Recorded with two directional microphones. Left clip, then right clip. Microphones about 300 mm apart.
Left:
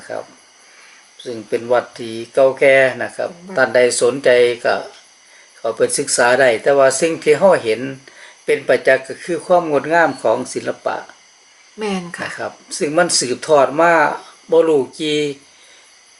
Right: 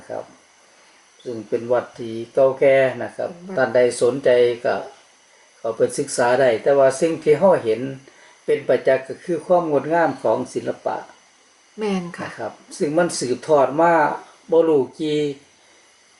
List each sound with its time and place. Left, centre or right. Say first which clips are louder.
1.2 s speech: left 3 dB; centre